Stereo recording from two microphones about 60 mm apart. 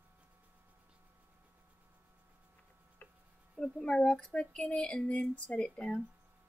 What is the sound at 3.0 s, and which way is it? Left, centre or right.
Tick-tock, left.